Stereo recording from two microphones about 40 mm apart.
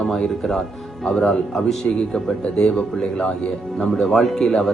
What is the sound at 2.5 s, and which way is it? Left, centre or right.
Speech, left.